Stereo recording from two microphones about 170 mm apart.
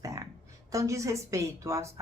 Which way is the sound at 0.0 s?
20° right (ahead or behind).